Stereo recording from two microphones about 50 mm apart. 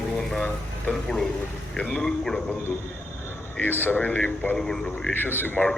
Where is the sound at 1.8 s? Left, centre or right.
Left.